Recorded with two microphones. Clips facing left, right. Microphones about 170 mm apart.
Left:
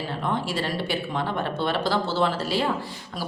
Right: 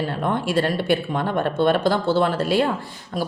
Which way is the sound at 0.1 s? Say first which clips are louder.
Right 5 dB; 55° right (ahead or behind).